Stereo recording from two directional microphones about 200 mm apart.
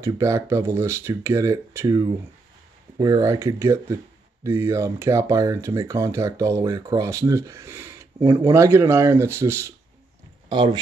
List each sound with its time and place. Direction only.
0.0 s speech: 15° right (ahead or behind)
10.5 s speech: 25° right (ahead or behind)